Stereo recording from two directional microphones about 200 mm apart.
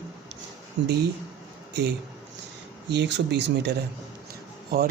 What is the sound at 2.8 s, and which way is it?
Speech, 60° right (ahead or behind).